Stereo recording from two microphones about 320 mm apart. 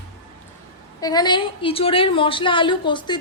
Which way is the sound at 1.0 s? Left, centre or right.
Centre.